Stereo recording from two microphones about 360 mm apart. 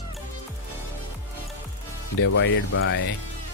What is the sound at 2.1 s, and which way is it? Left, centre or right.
Speech, left.